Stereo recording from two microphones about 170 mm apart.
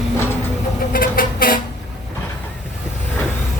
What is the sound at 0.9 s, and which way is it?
Vehicle, 55° left (ahead or behind).